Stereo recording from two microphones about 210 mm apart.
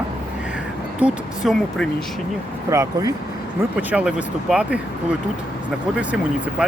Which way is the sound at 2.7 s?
15° right (ahead or behind).